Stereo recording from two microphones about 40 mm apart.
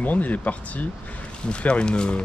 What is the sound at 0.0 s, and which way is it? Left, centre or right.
Speech, left.